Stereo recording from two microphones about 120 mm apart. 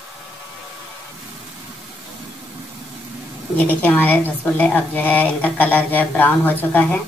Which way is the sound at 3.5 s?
15° left (ahead or behind).